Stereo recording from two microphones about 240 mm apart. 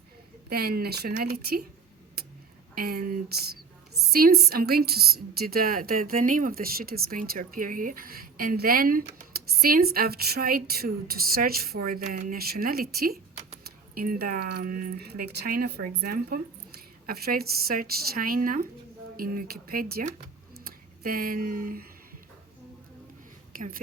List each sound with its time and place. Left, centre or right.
0.5 s a woman's voice: right
2.7 s a woman's voice: right
23.6 s a woman's voice: right